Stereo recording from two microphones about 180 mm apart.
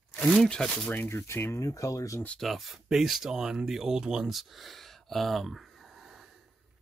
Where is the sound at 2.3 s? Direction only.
Centre (ahead or behind).